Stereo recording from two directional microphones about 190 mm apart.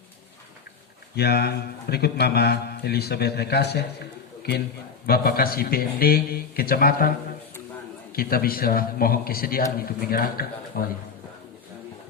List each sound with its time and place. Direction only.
1.1 s a man's voice: 55° left (ahead or behind)
5.0 s a man's voice: 55° left (ahead or behind)
8.1 s a man's voice: 50° left (ahead or behind)